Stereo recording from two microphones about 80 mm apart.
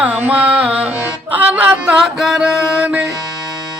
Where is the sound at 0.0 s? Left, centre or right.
Centre.